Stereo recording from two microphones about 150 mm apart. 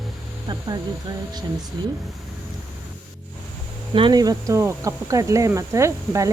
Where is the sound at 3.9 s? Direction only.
30° right (ahead or behind).